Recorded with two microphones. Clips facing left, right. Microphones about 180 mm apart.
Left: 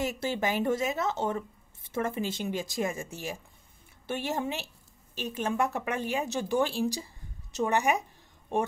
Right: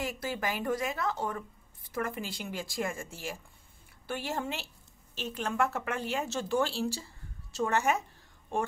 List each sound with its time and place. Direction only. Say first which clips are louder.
0.0 s a woman's voice: left 4 dB; 25° left (ahead or behind)